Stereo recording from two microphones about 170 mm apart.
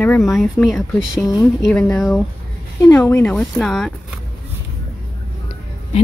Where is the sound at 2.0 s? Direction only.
Centre (ahead or behind).